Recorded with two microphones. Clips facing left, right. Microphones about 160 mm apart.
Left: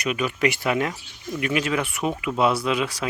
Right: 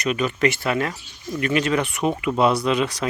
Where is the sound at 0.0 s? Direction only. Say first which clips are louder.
Right 2 dB; 10° left (ahead or behind).